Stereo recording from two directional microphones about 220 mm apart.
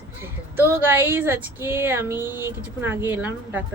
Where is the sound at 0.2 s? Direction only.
10° right (ahead or behind).